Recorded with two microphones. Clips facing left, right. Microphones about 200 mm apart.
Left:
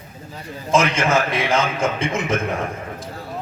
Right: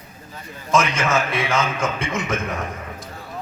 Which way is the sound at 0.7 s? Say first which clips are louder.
Left 2 dB; 30° left (ahead or behind).